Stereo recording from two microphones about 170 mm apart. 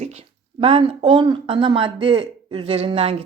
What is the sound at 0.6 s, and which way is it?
Speech, 35° right (ahead or behind).